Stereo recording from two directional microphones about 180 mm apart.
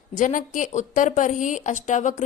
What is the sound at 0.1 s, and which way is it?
Speech, 45° left (ahead or behind).